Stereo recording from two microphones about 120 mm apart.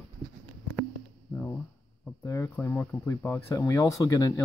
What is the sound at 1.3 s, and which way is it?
Speech, 20° left (ahead or behind).